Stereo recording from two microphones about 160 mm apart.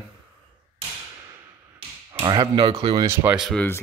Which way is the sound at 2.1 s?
30° right (ahead or behind).